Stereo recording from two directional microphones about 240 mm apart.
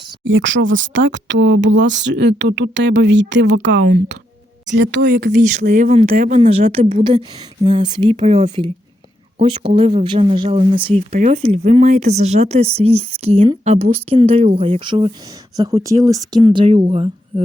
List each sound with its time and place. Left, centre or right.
0.3 s speech: right
3.8 s speech: right
4.7 s a woman's voice: right